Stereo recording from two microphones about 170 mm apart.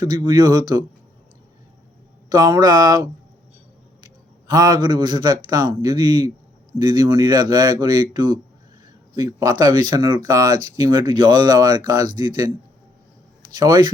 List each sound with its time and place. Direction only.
0.0 s speech: 25° right (ahead or behind)
2.3 s speech: 20° right (ahead or behind)
4.4 s speech: 20° right (ahead or behind)
13.5 s speech: 25° right (ahead or behind)